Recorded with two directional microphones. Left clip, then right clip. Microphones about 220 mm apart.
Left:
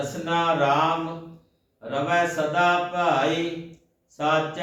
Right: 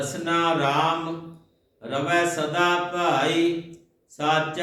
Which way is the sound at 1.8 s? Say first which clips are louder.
Even; 10° right (ahead or behind).